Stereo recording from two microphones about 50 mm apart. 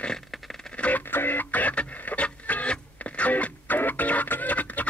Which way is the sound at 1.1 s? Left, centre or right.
Left.